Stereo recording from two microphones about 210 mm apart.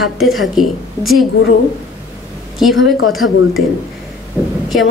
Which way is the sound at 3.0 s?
75° left (ahead or behind).